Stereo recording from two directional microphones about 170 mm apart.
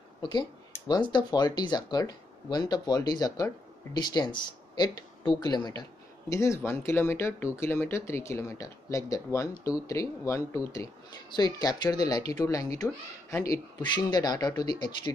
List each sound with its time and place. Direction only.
0.2 s speech: 25° left (ahead or behind)